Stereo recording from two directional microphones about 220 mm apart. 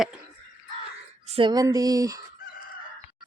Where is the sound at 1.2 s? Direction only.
25° right (ahead or behind).